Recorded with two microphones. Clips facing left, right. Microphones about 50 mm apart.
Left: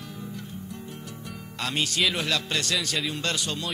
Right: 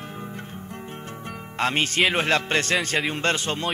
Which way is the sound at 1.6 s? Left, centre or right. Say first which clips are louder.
Right 5 dB; right.